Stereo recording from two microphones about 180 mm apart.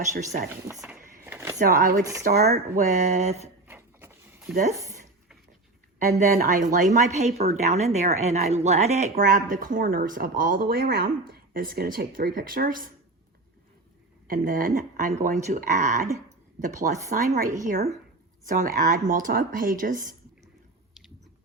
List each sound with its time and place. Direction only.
0.0 s speech: 40° right (ahead or behind)
1.2 s a sound: 15° right (ahead or behind)
1.5 s speech: 50° right (ahead or behind)
2.2 s speech: 60° right (ahead or behind)
2.5 s speech: 40° right (ahead or behind)
3.7 s vehicle: 10° right (ahead or behind)
4.5 s speech: 40° right (ahead or behind)
6.1 s speech: 45° right (ahead or behind)
9.2 s speech: 50° right (ahead or behind)
14.3 s speech: 50° right (ahead or behind)